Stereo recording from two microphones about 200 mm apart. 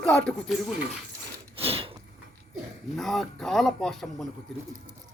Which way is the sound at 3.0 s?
Centre (ahead or behind).